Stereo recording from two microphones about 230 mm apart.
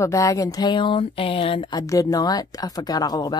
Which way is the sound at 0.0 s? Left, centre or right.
Centre.